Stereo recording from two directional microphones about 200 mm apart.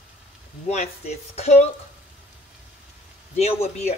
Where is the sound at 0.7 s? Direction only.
35° left (ahead or behind).